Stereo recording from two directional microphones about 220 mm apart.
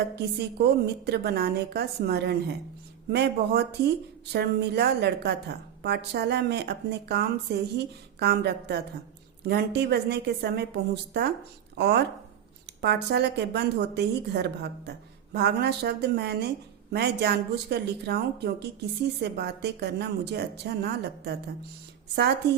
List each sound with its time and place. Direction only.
0.2 s a woman's voice: 50° right (ahead or behind)